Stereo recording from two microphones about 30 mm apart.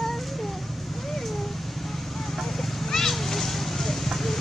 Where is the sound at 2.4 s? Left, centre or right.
Centre.